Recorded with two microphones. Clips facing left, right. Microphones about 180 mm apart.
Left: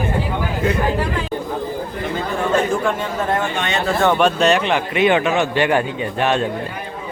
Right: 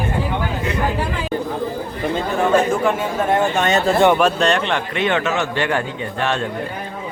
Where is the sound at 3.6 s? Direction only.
45° right (ahead or behind).